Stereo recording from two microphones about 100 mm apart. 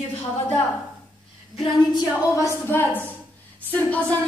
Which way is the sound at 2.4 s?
25° left (ahead or behind).